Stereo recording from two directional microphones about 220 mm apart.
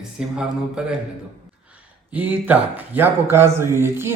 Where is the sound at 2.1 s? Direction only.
5° right (ahead or behind).